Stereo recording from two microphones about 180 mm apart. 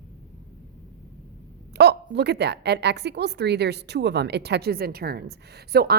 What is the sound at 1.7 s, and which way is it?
A woman's voice, 65° right (ahead or behind).